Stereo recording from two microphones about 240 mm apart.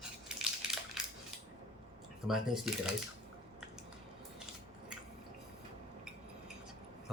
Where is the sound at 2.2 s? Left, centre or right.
Centre.